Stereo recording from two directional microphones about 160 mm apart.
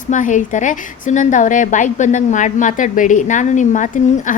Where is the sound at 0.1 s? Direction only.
50° left (ahead or behind).